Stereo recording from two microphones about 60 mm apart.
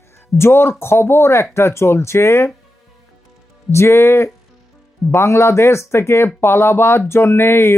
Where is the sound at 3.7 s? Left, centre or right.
Left.